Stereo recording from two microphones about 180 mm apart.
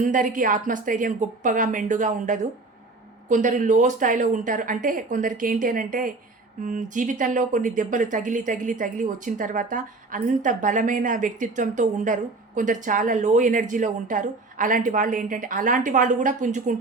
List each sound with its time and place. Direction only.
0.0 s a woman's voice: 45° right (ahead or behind)